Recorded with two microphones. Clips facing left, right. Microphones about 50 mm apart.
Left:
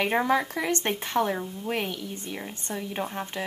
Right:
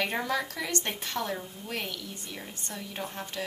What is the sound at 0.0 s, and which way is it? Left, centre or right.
Speech, left.